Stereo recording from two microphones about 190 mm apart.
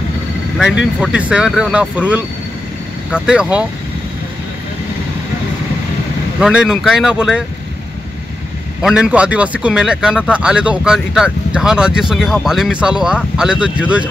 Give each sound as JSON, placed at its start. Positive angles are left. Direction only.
{"t": 1.0, "sound": "speech", "side_deg": -5}
{"t": 6.4, "sound": "speech", "side_deg": -5}
{"t": 8.8, "sound": "speech", "side_deg": -5}